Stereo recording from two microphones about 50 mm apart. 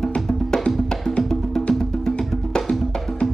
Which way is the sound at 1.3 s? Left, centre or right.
Centre.